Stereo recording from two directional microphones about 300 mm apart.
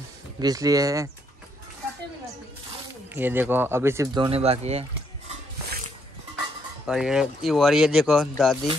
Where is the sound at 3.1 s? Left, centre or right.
Centre.